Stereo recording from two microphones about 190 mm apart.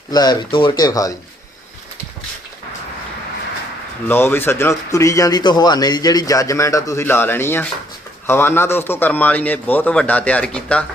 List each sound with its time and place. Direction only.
0.1 s speech: 20° left (ahead or behind)
4.1 s a man's voice: 10° left (ahead or behind)